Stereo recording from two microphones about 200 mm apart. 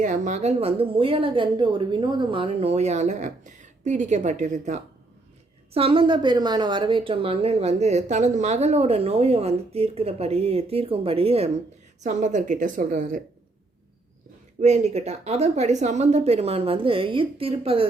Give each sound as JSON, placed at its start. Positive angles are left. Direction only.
{"t": 0.0, "sound": "a woman's voice", "side_deg": -35}
{"t": 14.6, "sound": "a woman's voice", "side_deg": -35}